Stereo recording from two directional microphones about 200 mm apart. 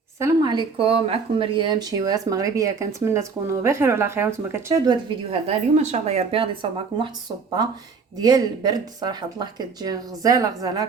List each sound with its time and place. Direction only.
0.2 s speech: 15° right (ahead or behind)
5.3 s speech: 30° right (ahead or behind)
8.2 s speech: 20° right (ahead or behind)